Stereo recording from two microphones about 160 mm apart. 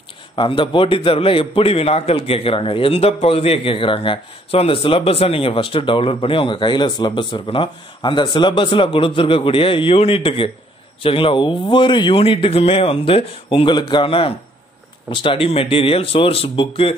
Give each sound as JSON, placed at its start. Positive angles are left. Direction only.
{"t": 0.4, "sound": "a man's voice", "side_deg": 35}